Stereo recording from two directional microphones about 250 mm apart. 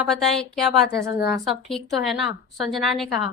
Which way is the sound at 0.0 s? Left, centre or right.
Centre.